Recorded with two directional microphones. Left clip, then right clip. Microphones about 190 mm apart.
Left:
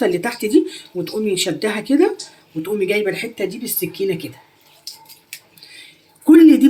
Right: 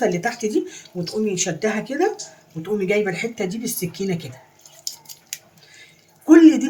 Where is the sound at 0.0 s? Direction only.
30° left (ahead or behind); by 4.3 s 15° left (ahead or behind).